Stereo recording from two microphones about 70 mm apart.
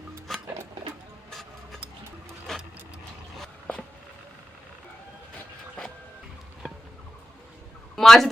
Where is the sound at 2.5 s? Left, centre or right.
Centre.